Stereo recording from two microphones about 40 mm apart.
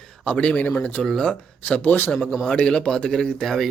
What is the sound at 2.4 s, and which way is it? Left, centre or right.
Speech, left.